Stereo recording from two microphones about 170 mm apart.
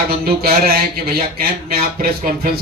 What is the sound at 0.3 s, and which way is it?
Speech, 60° right (ahead or behind).